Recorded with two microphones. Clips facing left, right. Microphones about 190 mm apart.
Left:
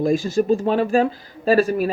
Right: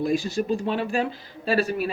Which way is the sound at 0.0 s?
45° left (ahead or behind).